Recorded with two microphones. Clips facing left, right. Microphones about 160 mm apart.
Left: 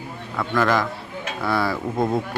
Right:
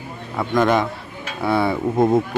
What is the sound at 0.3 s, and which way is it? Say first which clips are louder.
Speech: right 3 dB; 20° right (ahead or behind).